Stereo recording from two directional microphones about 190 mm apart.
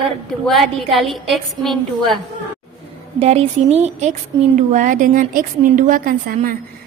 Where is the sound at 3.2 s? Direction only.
35° right (ahead or behind); by 6.5 s 50° right (ahead or behind).